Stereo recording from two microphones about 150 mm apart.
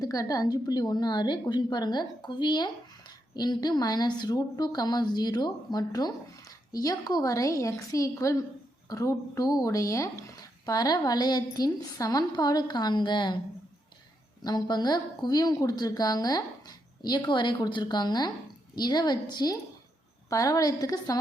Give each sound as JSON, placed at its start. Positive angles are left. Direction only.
{"t": 0.0, "sound": "a woman's voice", "side_deg": 25}
{"t": 14.4, "sound": "a woman's voice", "side_deg": 25}